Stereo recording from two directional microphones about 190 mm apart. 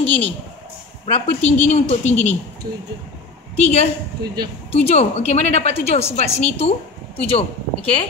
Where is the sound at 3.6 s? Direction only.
35° left (ahead or behind).